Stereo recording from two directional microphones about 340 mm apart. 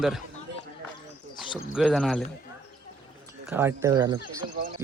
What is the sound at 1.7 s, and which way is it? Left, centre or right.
Speech, centre.